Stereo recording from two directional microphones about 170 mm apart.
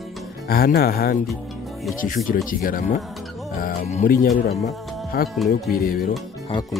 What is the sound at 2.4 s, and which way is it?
Speech, 55° left (ahead or behind).